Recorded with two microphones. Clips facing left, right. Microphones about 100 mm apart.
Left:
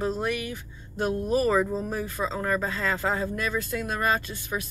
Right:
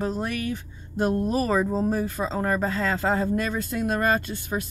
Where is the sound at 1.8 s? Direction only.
35° right (ahead or behind).